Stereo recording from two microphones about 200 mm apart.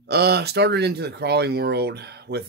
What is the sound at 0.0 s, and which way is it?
Speech, 55° right (ahead or behind).